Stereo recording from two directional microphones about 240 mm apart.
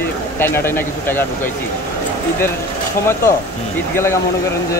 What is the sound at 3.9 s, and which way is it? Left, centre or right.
Speech, centre.